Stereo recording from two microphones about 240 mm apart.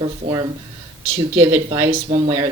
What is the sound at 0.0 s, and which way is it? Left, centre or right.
Speech, centre.